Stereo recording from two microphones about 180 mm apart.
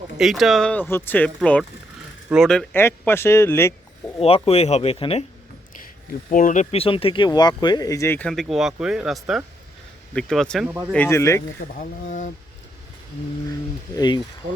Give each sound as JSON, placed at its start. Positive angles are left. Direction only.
{"t": 0.2, "sound": "speech", "side_deg": 0}
{"t": 3.1, "sound": "speech", "side_deg": 15}
{"t": 4.4, "sound": "speech", "side_deg": 35}
{"t": 6.3, "sound": "speech", "side_deg": 45}
{"t": 8.3, "sound": "speech", "side_deg": 0}
{"t": 10.7, "sound": "speech", "side_deg": -10}
{"t": 10.9, "sound": "speech", "side_deg": 10}
{"t": 13.9, "sound": "speech", "side_deg": 25}